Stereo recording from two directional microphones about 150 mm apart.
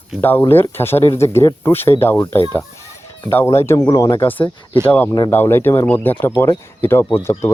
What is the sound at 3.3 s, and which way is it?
Speech, 15° left (ahead or behind).